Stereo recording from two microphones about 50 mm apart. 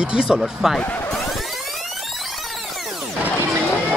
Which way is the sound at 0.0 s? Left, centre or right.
Centre.